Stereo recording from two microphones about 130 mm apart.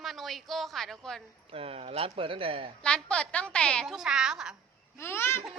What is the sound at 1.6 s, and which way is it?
Speech, 50° right (ahead or behind).